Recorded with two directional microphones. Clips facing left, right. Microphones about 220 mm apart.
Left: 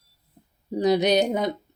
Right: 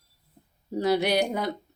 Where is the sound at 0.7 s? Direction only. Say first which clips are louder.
Left 4 dB; 20° left (ahead or behind).